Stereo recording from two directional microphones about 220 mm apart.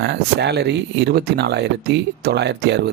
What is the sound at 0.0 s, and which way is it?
Speech, 50° right (ahead or behind).